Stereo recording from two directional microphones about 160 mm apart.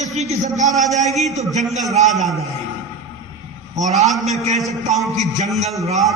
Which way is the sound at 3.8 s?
45° right (ahead or behind).